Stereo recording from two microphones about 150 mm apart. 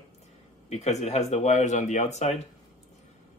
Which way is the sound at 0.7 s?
45° left (ahead or behind).